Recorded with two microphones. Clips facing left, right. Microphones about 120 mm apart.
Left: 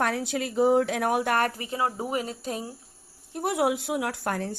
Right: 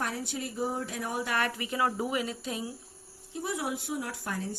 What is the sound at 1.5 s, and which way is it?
Speech, 35° left (ahead or behind).